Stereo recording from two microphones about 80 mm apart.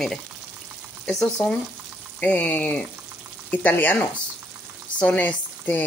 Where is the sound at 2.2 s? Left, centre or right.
Centre.